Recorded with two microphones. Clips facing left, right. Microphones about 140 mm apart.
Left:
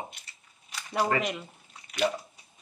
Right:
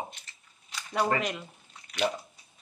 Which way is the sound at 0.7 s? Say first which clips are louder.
Even; 5° left (ahead or behind).